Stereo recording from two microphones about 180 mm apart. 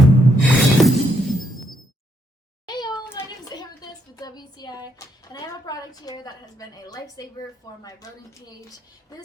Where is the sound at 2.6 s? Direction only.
20° left (ahead or behind).